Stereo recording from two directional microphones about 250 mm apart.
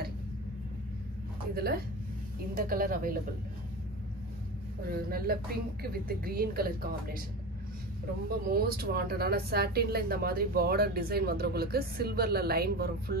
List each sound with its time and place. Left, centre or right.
1.5 s speech: right
4.8 s speech: right
8.3 s speech: right